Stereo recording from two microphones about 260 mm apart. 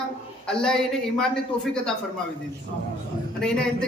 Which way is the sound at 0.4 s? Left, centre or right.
Centre.